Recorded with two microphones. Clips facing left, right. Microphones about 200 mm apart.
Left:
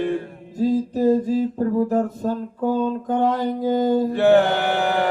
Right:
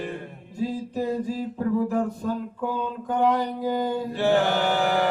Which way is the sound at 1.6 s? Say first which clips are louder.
Left 4 dB; 40° left (ahead or behind).